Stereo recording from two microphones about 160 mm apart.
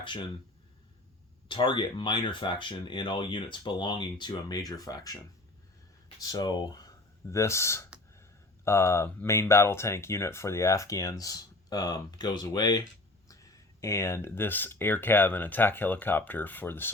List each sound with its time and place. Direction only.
0.0 s speech: 30° left (ahead or behind)
1.5 s speech: 30° left (ahead or behind)
6.1 s speech: 25° left (ahead or behind)